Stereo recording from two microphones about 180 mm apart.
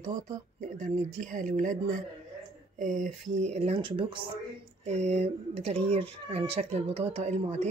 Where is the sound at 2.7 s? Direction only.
45° right (ahead or behind).